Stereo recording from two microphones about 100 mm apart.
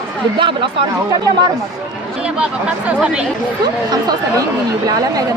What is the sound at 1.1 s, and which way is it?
Speech, 40° right (ahead or behind).